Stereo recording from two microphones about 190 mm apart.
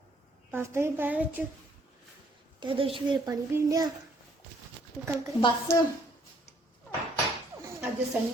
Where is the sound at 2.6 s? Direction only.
25° right (ahead or behind).